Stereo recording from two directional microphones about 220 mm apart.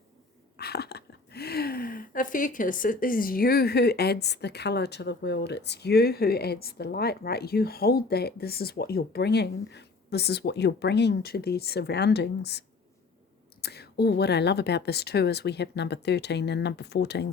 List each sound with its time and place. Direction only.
0.6 s speech: 45° left (ahead or behind)